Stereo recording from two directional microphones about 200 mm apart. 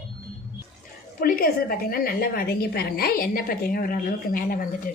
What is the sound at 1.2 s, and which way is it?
A woman's voice, 50° left (ahead or behind).